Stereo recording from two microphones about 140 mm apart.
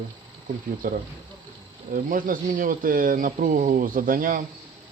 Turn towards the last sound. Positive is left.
turn(degrees=-80)